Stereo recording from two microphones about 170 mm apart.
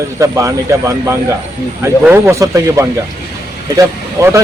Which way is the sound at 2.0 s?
15° right (ahead or behind).